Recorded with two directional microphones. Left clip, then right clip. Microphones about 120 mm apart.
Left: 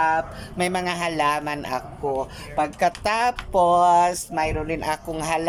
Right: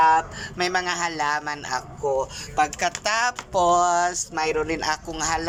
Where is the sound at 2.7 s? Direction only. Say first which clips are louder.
Left 2 dB; 40° left (ahead or behind).